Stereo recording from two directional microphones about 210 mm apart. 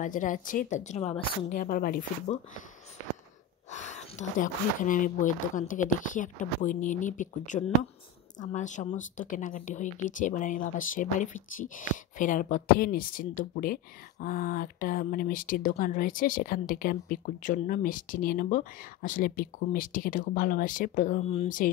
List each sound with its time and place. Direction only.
0.0 s speech: 40° left (ahead or behind)
3.7 s speech: 35° left (ahead or behind)